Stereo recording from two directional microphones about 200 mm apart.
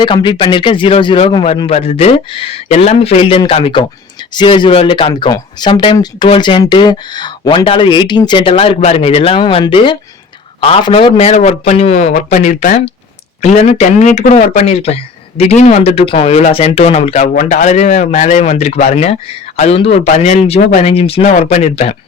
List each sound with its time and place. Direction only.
0.0 s speech: 25° left (ahead or behind)